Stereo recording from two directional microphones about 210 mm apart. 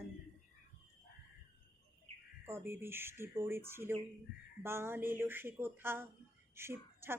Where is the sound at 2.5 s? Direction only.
10° right (ahead or behind).